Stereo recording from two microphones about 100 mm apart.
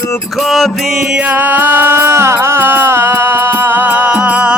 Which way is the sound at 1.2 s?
15° right (ahead or behind).